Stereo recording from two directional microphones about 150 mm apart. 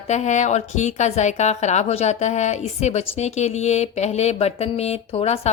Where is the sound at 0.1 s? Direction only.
50° left (ahead or behind).